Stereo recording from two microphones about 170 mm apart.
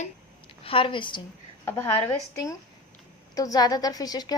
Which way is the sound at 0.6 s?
30° left (ahead or behind).